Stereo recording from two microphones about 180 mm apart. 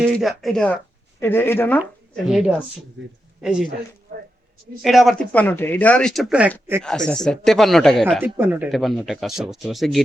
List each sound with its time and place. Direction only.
0.0 s speech: centre (ahead or behind)
1.8 s speech: centre (ahead or behind)
3.0 s speech: 90° right
3.4 s speech: 5° right (ahead or behind)
4.8 s speech: centre (ahead or behind)
8.2 s speech: 10° right (ahead or behind)